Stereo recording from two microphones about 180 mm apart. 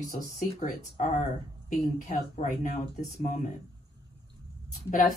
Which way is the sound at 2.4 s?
45° left (ahead or behind).